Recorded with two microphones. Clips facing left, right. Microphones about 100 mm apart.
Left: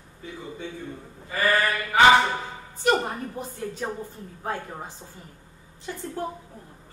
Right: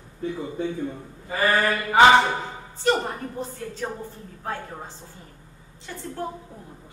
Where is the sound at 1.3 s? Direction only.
30° right (ahead or behind).